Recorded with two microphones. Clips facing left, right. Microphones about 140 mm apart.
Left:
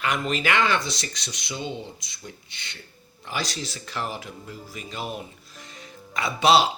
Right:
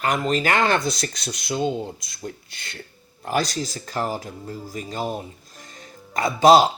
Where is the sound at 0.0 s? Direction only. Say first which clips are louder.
Right 4 dB; 40° right (ahead or behind).